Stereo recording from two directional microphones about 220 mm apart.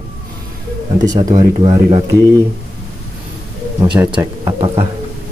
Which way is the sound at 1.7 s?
20° right (ahead or behind).